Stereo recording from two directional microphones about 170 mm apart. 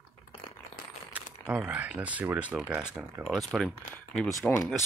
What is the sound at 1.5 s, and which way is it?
Speech, 5° right (ahead or behind).